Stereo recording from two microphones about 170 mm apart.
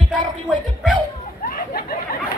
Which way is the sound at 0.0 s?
25° right (ahead or behind).